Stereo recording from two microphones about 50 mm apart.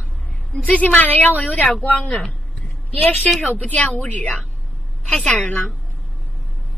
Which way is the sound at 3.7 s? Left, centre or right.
Left.